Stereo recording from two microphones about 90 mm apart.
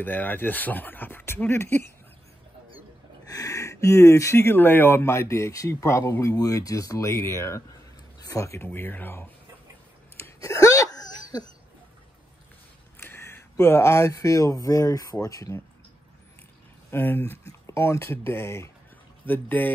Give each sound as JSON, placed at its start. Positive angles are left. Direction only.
{"t": 0.0, "sound": "speech", "side_deg": 20}
{"t": 3.3, "sound": "speech", "side_deg": 40}
{"t": 8.6, "sound": "speech", "side_deg": 20}
{"t": 10.1, "sound": "a sound", "side_deg": 30}
{"t": 13.0, "sound": "speech", "side_deg": 25}
{"t": 16.9, "sound": "speech", "side_deg": 25}